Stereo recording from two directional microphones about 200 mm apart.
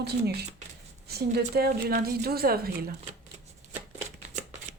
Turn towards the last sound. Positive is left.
turn(degrees=-35)  # may be behind; listen again after turning